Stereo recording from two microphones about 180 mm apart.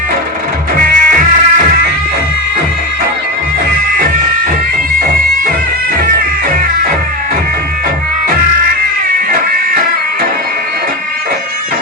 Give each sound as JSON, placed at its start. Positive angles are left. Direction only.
{"t": 0.9, "sound": "music", "side_deg": -50}